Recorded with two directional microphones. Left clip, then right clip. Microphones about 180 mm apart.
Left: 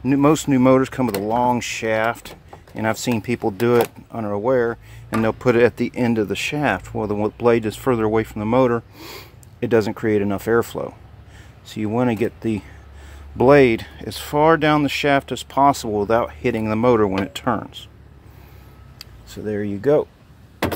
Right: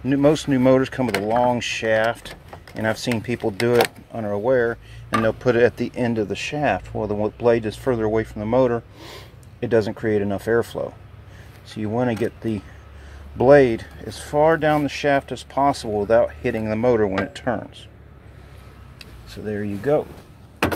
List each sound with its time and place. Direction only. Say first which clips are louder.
0.0 s speech: left 1 dB; 35° left (ahead or behind)
18.9 s speech: left 2 dB; 40° left (ahead or behind)